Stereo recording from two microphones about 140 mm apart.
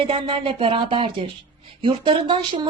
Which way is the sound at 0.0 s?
40° right (ahead or behind).